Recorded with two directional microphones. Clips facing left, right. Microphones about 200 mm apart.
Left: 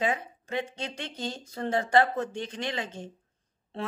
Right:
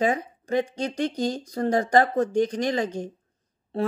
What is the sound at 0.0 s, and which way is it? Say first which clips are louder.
A woman's voice: right 5 dB; 40° right (ahead or behind).